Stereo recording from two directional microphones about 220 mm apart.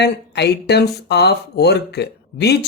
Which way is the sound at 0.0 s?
50° left (ahead or behind).